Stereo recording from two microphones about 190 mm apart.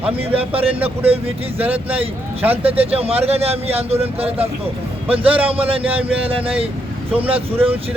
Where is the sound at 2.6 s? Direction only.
30° right (ahead or behind).